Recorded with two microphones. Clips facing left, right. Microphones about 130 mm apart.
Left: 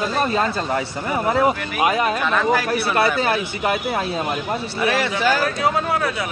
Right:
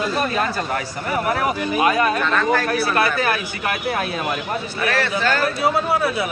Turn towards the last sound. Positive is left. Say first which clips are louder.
# left 1 dB
turn(degrees=15)  # may be behind; listen again after turning